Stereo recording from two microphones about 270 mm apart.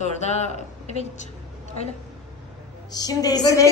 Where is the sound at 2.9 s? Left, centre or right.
Centre.